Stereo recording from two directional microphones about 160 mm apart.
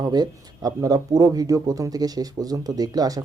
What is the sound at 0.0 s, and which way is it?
Speech, 25° right (ahead or behind).